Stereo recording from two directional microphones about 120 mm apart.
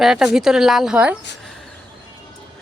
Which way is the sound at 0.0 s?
5° right (ahead or behind).